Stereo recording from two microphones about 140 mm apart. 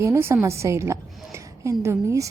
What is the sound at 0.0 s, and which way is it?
A woman's voice, 20° right (ahead or behind).